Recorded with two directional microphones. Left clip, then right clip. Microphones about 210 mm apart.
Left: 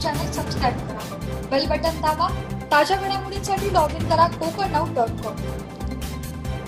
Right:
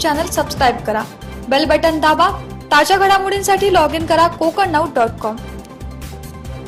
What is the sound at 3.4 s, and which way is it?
Speech, 35° right (ahead or behind).